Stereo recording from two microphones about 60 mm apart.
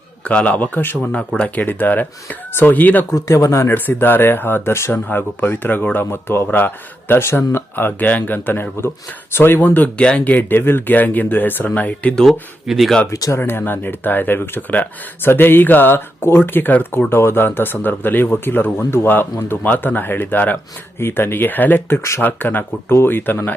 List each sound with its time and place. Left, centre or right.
0.3 s speech: left
3.1 s speech: left
3.7 s speech: left
9.6 s speech: left
10.0 s speech: centre
10.2 s speech: left
12.1 s speech: centre
12.6 s speech: centre
13.1 s speech: left
13.4 s speech: left
17.1 s speech: left